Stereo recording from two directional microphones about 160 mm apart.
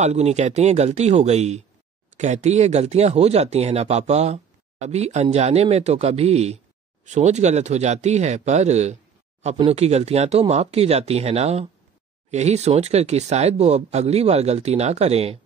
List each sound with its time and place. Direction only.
0.0 s speech: 45° right (ahead or behind)